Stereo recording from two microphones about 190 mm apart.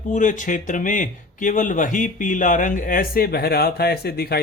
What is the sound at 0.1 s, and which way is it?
Speech, 40° left (ahead or behind).